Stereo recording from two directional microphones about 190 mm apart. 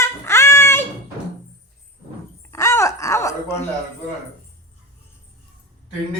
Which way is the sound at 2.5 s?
15° left (ahead or behind).